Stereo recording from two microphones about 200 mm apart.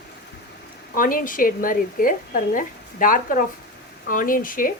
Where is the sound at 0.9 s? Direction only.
45° left (ahead or behind).